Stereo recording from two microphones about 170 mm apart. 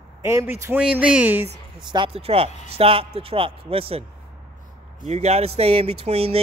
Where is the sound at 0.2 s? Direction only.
15° right (ahead or behind).